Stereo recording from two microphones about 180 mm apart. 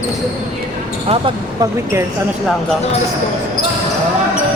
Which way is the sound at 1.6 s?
15° right (ahead or behind).